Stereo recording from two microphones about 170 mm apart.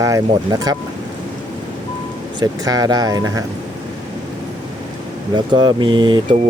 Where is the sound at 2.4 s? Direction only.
20° right (ahead or behind).